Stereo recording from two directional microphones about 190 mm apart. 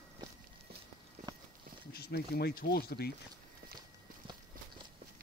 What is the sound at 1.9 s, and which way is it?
Speech, 55° left (ahead or behind).